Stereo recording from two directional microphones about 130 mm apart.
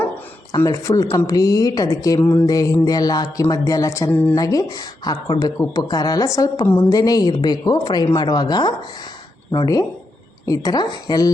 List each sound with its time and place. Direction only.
0.6 s speech: 25° left (ahead or behind)
4.1 s speech: 15° left (ahead or behind)
4.4 s a woman's voice: 30° left (ahead or behind)
10.4 s speech: 25° left (ahead or behind)